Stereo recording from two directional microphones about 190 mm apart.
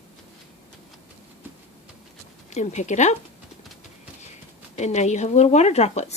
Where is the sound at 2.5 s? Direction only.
40° left (ahead or behind).